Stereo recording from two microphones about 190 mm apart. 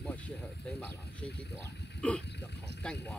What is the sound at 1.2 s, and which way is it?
Speech, 60° left (ahead or behind).